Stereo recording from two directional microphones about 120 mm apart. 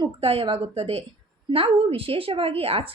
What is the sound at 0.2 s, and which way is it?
A woman's voice, 50° right (ahead or behind).